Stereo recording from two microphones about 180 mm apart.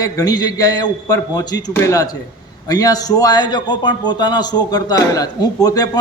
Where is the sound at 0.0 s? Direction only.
20° left (ahead or behind).